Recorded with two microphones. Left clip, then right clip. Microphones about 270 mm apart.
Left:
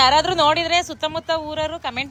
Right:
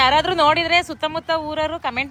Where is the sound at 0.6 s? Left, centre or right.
Left.